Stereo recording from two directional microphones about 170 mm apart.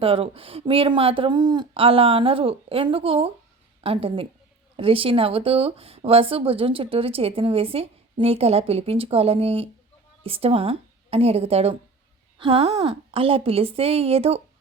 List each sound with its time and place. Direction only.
0.0 s speech: 35° right (ahead or behind)